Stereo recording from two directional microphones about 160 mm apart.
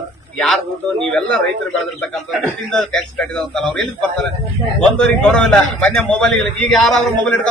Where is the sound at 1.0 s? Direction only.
5° left (ahead or behind).